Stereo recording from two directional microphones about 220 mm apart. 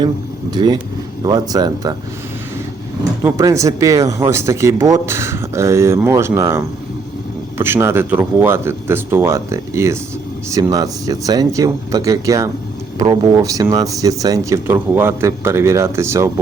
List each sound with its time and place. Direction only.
0.5 s speech: 20° right (ahead or behind)
3.2 s speech: 15° right (ahead or behind)